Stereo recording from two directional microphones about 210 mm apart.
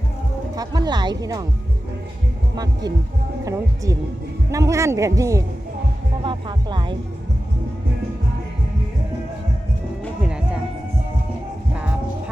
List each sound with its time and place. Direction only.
0.5 s speech: 20° right (ahead or behind)
3.4 s speech: 15° right (ahead or behind)
10.0 s music: 5° right (ahead or behind)